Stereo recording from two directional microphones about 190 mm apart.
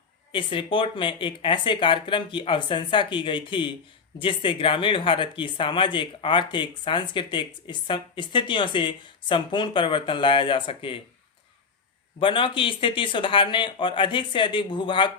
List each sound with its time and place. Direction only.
0.3 s speech: 25° left (ahead or behind)
12.2 s speech: 25° left (ahead or behind)